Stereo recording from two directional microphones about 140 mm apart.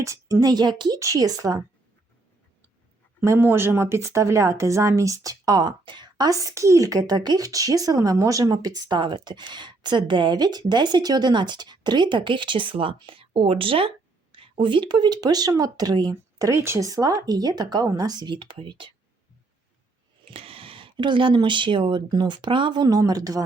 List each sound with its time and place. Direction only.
0.0 s speech: 20° right (ahead or behind)
3.2 s speech: 15° right (ahead or behind); by 18.9 s 35° right (ahead or behind)
20.3 s speech: 40° right (ahead or behind)